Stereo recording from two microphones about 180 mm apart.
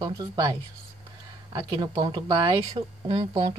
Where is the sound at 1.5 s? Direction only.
25° right (ahead or behind).